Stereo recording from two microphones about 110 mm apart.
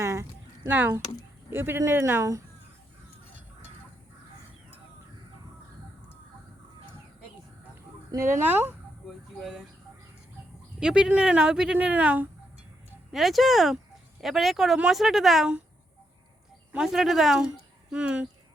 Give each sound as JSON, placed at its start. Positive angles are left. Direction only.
{"t": 0.0, "sound": "a sound", "side_deg": -25}
{"t": 0.7, "sound": "speech", "side_deg": -15}
{"t": 8.1, "sound": "speech", "side_deg": -25}
{"t": 9.4, "sound": "a woman's voice", "side_deg": -5}
{"t": 10.8, "sound": "speech", "side_deg": -5}
{"t": 13.1, "sound": "a woman's voice", "side_deg": 0}
{"t": 16.7, "sound": "a woman's voice", "side_deg": -5}